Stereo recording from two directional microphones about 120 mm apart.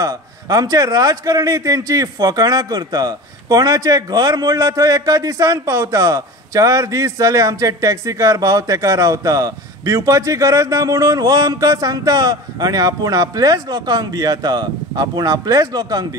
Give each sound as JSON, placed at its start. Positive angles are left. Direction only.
{"t": 0.0, "sound": "a man's voice", "side_deg": -30}